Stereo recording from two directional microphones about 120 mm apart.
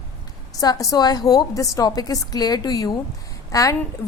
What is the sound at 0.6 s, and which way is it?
A woman's voice, 30° left (ahead or behind).